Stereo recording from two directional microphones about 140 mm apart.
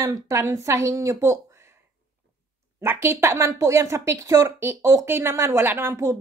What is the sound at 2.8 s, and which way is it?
Speech, 15° right (ahead or behind).